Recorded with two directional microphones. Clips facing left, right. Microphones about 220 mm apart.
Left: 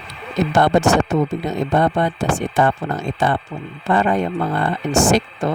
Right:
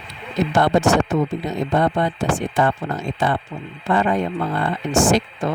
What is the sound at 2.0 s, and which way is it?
A man's voice, 45° left (ahead or behind).